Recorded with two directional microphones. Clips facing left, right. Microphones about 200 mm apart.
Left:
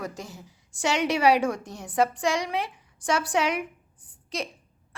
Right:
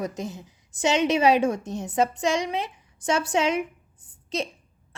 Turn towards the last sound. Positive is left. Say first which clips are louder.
# right 4 dB
turn(degrees=-25)  # may be behind; listen again after turning